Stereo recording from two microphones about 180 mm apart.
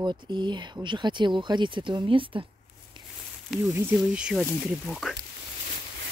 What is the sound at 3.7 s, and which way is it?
Speech, 10° right (ahead or behind).